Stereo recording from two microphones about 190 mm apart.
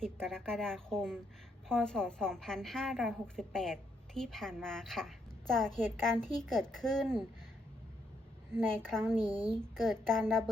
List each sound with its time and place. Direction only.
0.0 s a woman's voice: 5° left (ahead or behind)
8.8 s a woman's voice: 5° left (ahead or behind)
9.2 s a woman's voice: 20° left (ahead or behind)
9.5 s a woman's voice: centre (ahead or behind)